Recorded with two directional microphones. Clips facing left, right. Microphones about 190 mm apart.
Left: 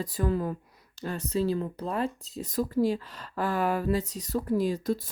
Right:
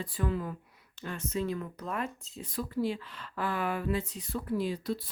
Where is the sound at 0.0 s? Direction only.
40° left (ahead or behind).